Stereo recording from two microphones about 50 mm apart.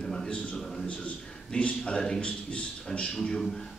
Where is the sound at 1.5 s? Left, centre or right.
Centre.